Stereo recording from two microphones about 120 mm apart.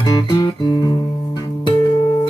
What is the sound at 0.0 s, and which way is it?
Guitar, 30° left (ahead or behind).